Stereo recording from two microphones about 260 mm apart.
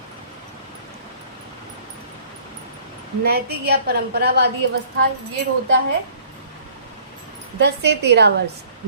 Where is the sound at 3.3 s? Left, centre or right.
Right.